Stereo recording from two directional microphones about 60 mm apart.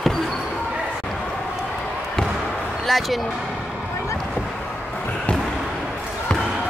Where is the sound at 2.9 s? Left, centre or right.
Centre.